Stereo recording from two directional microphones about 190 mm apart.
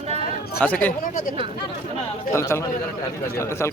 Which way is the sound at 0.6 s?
10° left (ahead or behind).